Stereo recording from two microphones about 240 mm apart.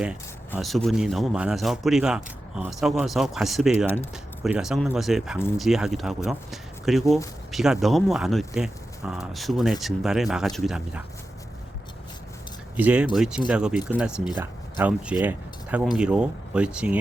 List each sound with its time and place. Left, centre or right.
0.5 s a man's voice: centre
12.7 s a man's voice: centre